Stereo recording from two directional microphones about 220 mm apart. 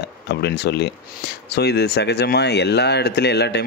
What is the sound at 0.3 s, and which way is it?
Speech, 50° left (ahead or behind).